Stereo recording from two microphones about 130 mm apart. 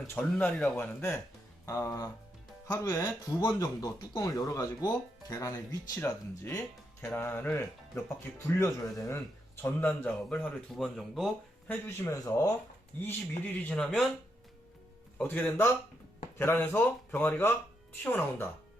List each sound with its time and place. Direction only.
0.1 s speech: 10° left (ahead or behind)
11.7 s speech: 20° left (ahead or behind)
13.0 s speech: 15° left (ahead or behind)
15.2 s speech: 15° left (ahead or behind)